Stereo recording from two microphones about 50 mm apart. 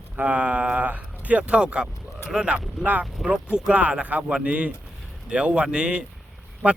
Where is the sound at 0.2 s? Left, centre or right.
Right.